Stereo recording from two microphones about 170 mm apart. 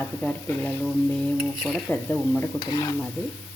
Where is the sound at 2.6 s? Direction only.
25° left (ahead or behind).